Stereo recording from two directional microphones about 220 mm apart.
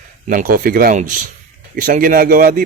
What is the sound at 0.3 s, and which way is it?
A man's voice, 40° right (ahead or behind).